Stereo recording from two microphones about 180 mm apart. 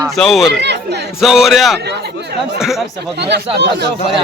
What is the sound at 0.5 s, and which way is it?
Speech, 70° right (ahead or behind).